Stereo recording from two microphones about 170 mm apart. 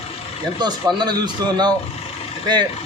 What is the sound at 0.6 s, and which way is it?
Speech, 25° right (ahead or behind).